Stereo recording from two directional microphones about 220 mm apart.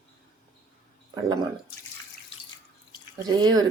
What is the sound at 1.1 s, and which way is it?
Speech, 15° right (ahead or behind).